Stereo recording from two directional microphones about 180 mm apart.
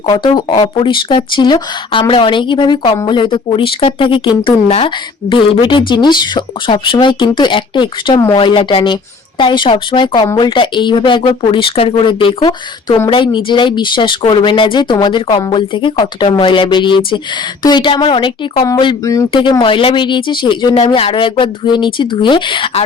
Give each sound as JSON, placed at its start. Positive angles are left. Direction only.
{"t": 0.3, "sound": "speech", "side_deg": 25}